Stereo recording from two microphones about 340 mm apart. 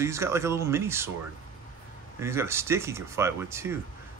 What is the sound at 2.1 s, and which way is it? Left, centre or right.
Speech, centre.